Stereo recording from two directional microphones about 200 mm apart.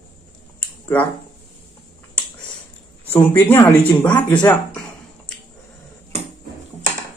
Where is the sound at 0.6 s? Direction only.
10° left (ahead or behind).